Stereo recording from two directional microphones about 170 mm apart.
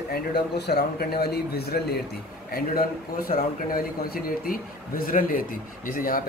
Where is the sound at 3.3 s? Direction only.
55° left (ahead or behind).